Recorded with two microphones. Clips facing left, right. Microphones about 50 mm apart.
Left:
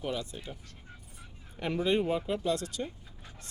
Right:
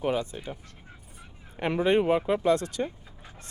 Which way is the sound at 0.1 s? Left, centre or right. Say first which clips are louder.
Right 7 dB; right.